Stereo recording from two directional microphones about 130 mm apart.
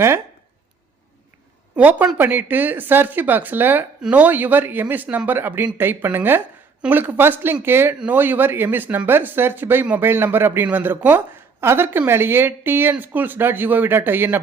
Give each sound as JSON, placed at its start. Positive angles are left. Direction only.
{"t": 1.7, "sound": "speech", "side_deg": -10}